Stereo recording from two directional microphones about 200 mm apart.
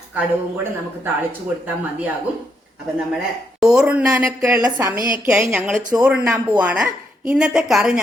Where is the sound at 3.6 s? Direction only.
5° right (ahead or behind).